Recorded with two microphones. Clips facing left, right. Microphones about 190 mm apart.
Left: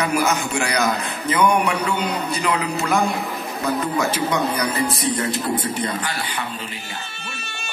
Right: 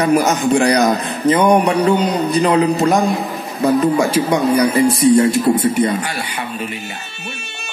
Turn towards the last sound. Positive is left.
turn(degrees=-25)  # may be behind; listen again after turning